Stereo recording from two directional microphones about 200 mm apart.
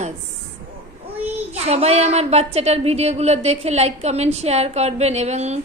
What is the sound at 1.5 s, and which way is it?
A woman's voice, 30° right (ahead or behind).